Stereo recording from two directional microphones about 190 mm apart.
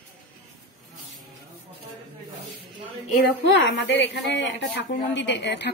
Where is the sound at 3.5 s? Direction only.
70° left (ahead or behind).